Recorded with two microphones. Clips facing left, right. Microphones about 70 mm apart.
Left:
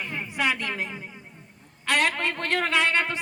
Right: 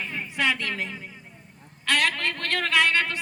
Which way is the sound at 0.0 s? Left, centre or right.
Centre.